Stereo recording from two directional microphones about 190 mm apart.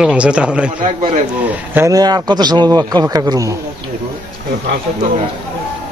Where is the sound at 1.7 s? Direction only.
15° right (ahead or behind).